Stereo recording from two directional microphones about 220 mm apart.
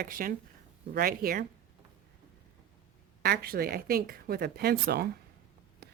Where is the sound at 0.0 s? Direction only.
40° right (ahead or behind).